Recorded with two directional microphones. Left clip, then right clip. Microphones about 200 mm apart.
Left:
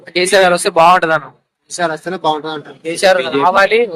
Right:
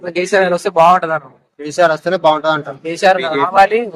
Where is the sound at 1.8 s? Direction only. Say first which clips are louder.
Right 6 dB; 55° right (ahead or behind).